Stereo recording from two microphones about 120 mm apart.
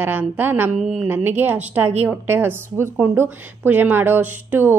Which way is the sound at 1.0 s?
15° right (ahead or behind).